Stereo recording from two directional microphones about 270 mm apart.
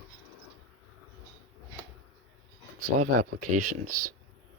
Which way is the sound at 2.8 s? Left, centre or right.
Right.